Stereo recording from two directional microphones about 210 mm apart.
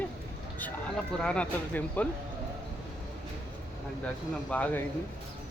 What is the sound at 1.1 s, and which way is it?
Speech, 5° left (ahead or behind).